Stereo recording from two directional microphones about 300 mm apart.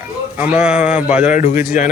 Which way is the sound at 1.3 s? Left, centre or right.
Left.